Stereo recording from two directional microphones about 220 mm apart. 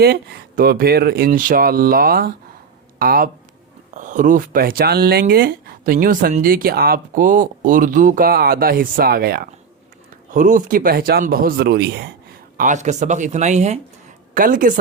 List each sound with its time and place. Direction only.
0.0 s speech: 45° right (ahead or behind)
12.5 s speech: 35° right (ahead or behind)